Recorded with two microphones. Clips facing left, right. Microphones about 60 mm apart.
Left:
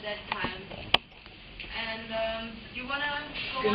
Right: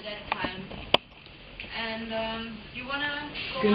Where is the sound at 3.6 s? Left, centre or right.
Right.